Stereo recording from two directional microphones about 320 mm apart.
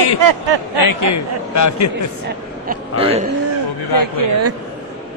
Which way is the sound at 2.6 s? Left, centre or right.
Centre.